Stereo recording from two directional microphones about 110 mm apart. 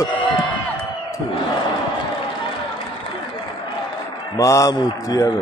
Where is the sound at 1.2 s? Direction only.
45° left (ahead or behind).